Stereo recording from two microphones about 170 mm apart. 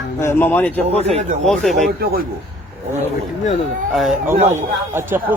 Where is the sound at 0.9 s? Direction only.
40° right (ahead or behind).